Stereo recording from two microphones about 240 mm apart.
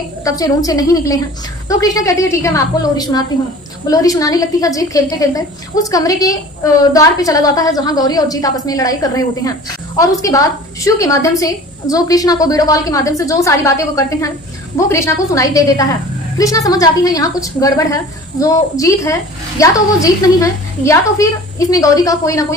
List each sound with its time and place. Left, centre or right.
0.3 s a woman's voice: centre